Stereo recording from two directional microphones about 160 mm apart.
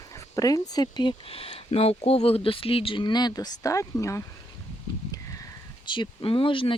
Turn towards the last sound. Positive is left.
turn(degrees=35)  # may be behind; listen again after turning